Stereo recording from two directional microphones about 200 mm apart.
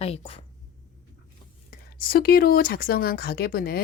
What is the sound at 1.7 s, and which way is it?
Speech, 50° left (ahead or behind).